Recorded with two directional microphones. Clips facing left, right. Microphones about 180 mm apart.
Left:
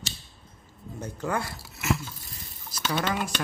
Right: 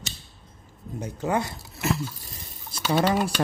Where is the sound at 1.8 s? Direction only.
35° right (ahead or behind).